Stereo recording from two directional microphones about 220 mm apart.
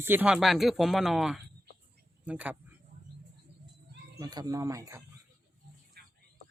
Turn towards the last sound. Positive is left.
turn(degrees=-45)  # may be behind; listen again after turning